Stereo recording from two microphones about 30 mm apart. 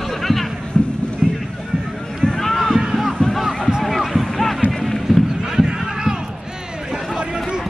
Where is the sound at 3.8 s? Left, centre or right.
Centre.